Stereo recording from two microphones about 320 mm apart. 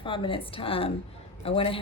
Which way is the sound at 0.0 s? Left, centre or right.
Centre.